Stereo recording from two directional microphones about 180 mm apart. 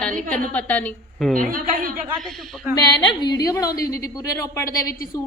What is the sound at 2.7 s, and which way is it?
A woman's voice, 25° left (ahead or behind).